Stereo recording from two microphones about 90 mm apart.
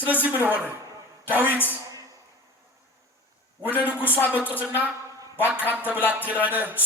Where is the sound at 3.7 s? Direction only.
20° right (ahead or behind).